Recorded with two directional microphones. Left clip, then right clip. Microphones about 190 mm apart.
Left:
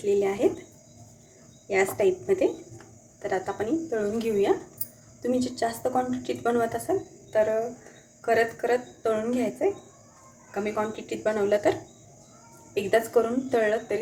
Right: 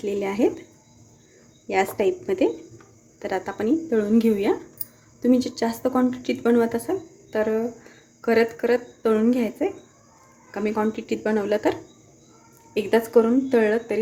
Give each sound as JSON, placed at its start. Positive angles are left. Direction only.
{"t": 0.2, "sound": "speech", "side_deg": -45}
{"t": 1.6, "sound": "speech", "side_deg": -45}
{"t": 8.2, "sound": "speech", "side_deg": -50}